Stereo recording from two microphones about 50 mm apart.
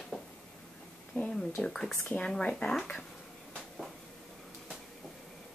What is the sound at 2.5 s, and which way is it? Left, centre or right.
Speech, centre.